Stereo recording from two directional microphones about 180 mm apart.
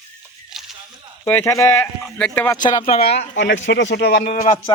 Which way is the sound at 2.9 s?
60° left (ahead or behind).